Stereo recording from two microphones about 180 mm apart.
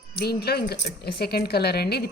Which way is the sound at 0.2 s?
60° left (ahead or behind).